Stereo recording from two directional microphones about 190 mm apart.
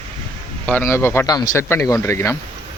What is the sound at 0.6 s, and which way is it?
A man's voice, 10° left (ahead or behind).